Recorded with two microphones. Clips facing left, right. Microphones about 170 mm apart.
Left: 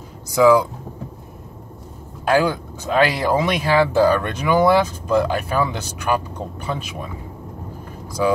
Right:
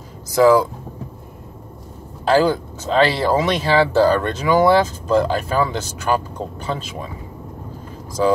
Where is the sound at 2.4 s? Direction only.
10° left (ahead or behind).